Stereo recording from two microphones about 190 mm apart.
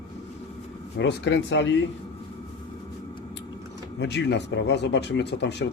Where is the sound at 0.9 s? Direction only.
65° left (ahead or behind).